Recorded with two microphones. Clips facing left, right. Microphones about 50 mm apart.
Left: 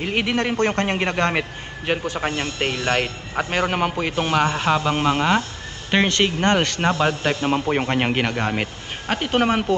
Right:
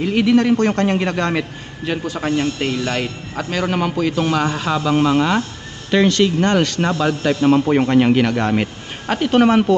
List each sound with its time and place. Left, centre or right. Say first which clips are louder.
0.0 s a man's voice: right 7 dB; left
2.2 s a man's voice: right 8 dB; left
2.6 s a man's voice: right 1 dB; left; by 5.4 s centre
5.9 s a man's voice: right 4 dB; left; by 9.7 s centre